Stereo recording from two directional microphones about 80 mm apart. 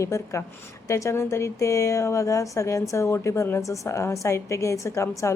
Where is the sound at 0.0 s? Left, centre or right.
Left.